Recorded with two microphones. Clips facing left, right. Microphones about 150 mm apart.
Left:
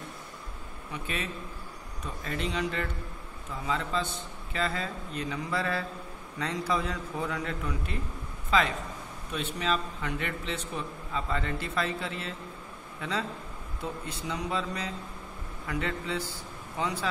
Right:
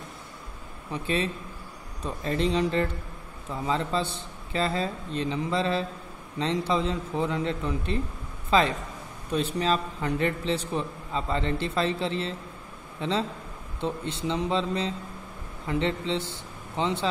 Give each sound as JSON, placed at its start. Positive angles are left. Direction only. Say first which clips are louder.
{"t": 0.9, "sound": "a man's voice", "louder": "right 7 dB", "side_deg": -30}